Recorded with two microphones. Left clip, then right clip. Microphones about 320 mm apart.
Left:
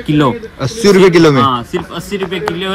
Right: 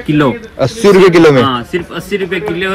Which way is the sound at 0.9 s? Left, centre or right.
Right.